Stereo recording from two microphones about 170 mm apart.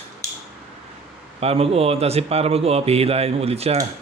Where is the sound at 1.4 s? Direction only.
35° right (ahead or behind).